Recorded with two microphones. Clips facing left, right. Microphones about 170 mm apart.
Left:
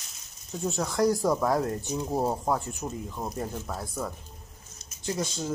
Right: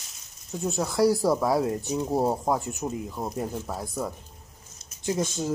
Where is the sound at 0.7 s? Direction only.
5° right (ahead or behind).